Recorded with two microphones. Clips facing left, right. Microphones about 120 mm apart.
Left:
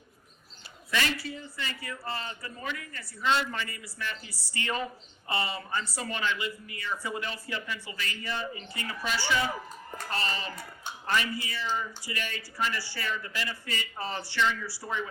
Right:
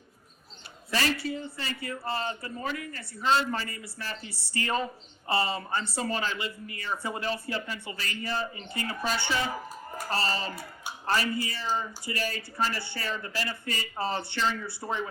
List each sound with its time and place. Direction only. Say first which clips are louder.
0.9 s speech: right 2 dB; 35° right (ahead or behind)